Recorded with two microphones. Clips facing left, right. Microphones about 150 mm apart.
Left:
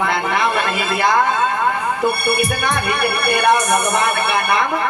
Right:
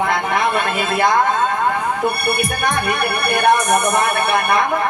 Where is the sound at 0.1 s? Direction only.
50° right (ahead or behind).